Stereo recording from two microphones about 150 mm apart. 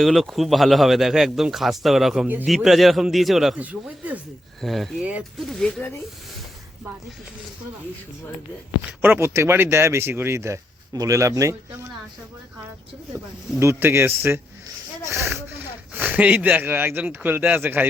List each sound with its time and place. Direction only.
0.0 s speech: centre (ahead or behind)
8.9 s speech: 10° right (ahead or behind)
13.1 s speech: 15° right (ahead or behind)